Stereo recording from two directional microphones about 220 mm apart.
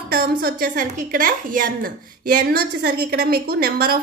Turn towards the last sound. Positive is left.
turn(degrees=-45)  # may be behind; listen again after turning